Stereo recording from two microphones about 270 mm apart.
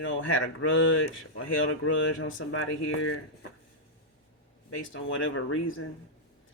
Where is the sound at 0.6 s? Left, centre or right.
Left.